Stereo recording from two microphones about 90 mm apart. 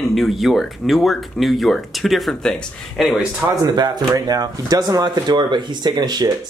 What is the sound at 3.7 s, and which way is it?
Speech, 50° right (ahead or behind).